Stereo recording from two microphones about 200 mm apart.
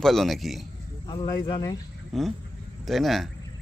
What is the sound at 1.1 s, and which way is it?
Speech, 20° left (ahead or behind).